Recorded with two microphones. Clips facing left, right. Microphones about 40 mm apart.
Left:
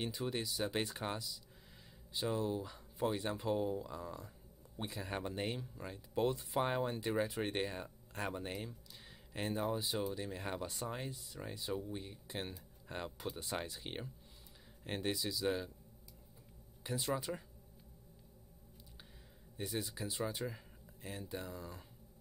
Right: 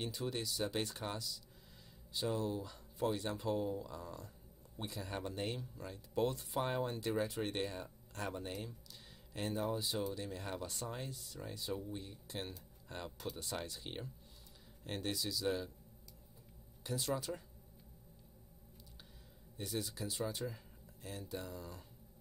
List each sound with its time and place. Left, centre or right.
0.0 s speech: centre
16.8 s speech: centre
19.5 s speech: centre